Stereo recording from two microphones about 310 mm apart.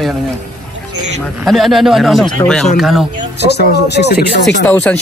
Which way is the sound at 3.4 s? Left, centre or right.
Left.